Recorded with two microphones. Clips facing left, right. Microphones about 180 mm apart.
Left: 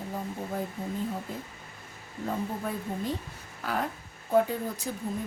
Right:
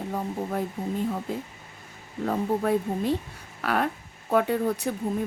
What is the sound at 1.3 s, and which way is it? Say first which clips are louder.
Speech: right 6 dB; 80° right.